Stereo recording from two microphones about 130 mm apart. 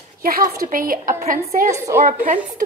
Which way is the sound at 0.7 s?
90° right.